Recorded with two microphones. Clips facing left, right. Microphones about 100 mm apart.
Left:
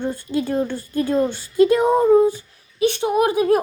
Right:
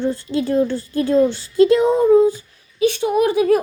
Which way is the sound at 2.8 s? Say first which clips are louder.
Right 1 dB; 25° left (ahead or behind).